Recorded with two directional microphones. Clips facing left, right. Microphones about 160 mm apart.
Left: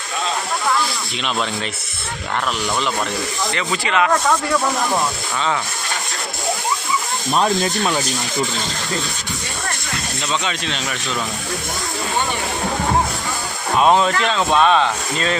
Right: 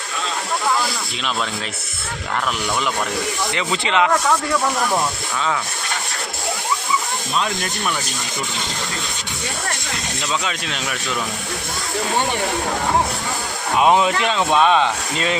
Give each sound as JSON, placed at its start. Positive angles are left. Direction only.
{"t": 3.5, "sound": "speech", "side_deg": -20}
{"t": 7.6, "sound": "speech", "side_deg": 30}
{"t": 10.4, "sound": "speech", "side_deg": -5}
{"t": 13.7, "sound": "speech", "side_deg": -10}